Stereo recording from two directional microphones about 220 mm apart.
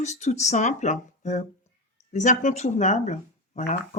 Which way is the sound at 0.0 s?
30° left (ahead or behind).